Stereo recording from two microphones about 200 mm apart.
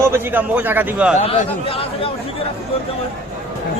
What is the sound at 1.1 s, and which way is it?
Speech, 30° left (ahead or behind).